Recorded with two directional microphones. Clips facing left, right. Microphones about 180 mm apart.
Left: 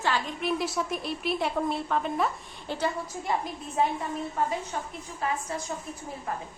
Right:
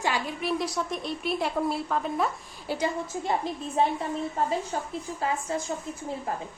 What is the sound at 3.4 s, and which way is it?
A woman's voice, 30° right (ahead or behind).